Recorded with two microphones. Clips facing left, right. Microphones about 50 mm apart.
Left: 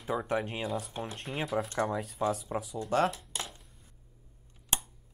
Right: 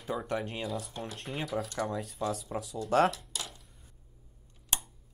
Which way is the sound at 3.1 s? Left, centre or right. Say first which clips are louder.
Left 1 dB; left.